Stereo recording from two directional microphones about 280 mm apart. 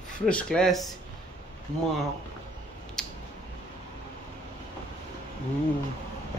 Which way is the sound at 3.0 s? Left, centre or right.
Centre.